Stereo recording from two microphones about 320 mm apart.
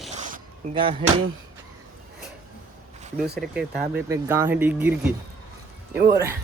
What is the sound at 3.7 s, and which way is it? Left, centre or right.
Speech, right.